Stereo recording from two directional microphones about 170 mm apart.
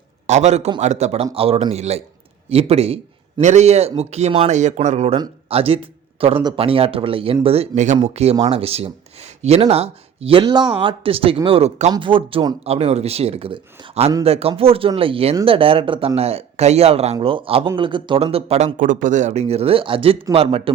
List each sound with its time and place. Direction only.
0.3 s speech: 40° right (ahead or behind)